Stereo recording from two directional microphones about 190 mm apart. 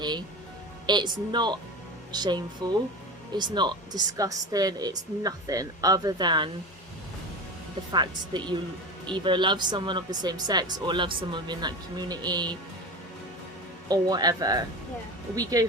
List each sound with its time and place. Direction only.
0.9 s speech: 25° right (ahead or behind)
7.9 s speech: 25° right (ahead or behind)
13.8 s speech: 20° right (ahead or behind)